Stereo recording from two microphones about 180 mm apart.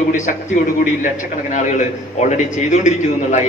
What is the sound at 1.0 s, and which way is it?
A man's voice, 45° left (ahead or behind).